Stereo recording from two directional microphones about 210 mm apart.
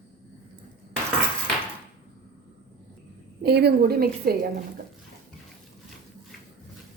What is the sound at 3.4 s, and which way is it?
Speech, 50° right (ahead or behind).